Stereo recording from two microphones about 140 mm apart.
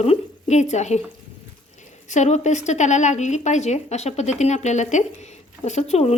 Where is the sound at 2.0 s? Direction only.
60° left (ahead or behind).